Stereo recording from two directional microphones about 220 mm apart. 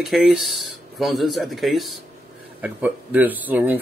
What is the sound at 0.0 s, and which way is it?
A man's voice, centre (ahead or behind).